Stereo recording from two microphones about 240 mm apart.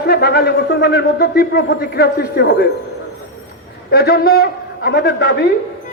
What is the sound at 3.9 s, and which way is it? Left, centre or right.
A man's voice, left.